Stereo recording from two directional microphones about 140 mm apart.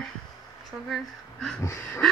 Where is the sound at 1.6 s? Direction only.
20° left (ahead or behind).